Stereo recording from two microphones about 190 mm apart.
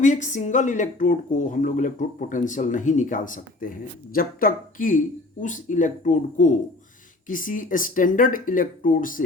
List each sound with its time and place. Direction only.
0.0 s speech: 40° left (ahead or behind)